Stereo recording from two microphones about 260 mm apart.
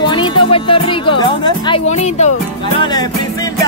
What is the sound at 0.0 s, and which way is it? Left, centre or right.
Music, centre.